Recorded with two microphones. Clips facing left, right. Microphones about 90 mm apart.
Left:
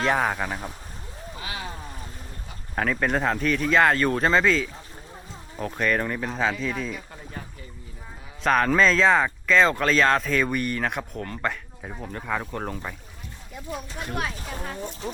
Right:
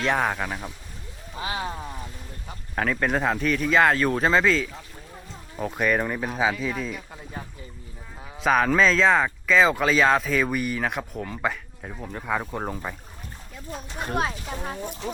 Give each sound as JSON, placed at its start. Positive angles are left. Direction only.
{"t": 0.0, "sound": "speech", "side_deg": 0}
{"t": 1.4, "sound": "a sound", "side_deg": -30}
{"t": 2.7, "sound": "speech", "side_deg": 0}
{"t": 7.4, "sound": "boat", "side_deg": -10}
{"t": 8.4, "sound": "speech", "side_deg": -5}
{"t": 13.7, "sound": "speech", "side_deg": -40}
{"t": 14.5, "sound": "speech", "side_deg": -20}